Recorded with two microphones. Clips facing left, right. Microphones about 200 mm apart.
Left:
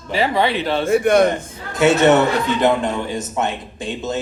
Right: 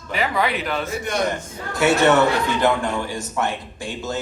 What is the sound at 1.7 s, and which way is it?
Speech, 20° left (ahead or behind).